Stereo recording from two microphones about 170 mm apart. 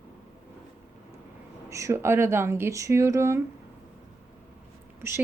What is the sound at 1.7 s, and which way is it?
Speech, 20° right (ahead or behind).